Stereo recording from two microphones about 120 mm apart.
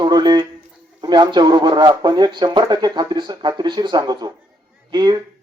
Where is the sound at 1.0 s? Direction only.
35° right (ahead or behind).